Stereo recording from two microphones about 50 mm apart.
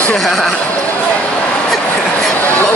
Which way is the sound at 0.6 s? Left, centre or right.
Left.